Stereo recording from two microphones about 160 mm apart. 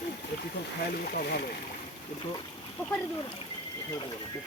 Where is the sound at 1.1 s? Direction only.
75° left (ahead or behind).